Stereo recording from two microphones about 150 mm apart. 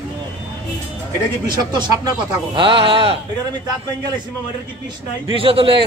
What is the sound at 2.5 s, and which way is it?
Speech, 35° right (ahead or behind).